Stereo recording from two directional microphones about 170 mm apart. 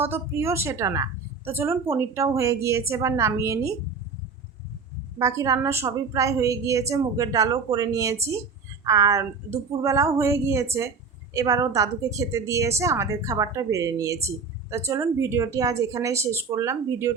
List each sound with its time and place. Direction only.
0.0 s a woman's voice: 15° right (ahead or behind)
5.2 s a woman's voice: 20° right (ahead or behind)